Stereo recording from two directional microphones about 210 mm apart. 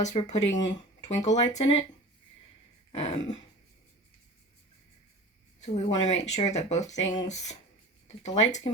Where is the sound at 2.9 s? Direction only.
30° left (ahead or behind).